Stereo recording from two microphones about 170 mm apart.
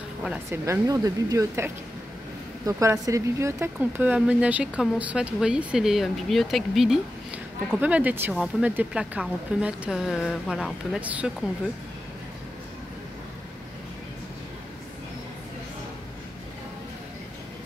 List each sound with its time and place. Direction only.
0.5 s speech: 20° right (ahead or behind)